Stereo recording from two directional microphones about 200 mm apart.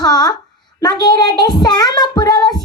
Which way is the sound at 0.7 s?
20° left (ahead or behind).